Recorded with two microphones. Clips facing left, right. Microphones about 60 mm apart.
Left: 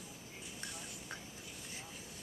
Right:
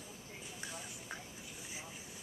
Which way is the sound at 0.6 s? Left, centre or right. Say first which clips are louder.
Right 1 dB; centre.